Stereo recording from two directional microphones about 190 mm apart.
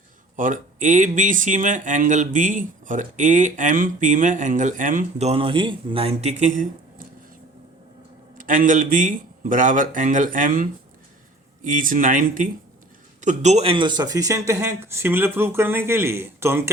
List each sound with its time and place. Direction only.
0.3 s speech: 45° right (ahead or behind)
8.4 s speech: 45° right (ahead or behind); by 16.7 s 15° right (ahead or behind)